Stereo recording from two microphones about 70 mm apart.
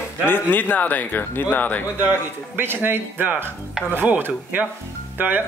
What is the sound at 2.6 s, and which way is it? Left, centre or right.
A man's voice, right.